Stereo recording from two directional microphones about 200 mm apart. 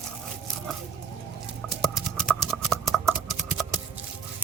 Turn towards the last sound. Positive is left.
turn(degrees=0)  # may be behind; listen again after turning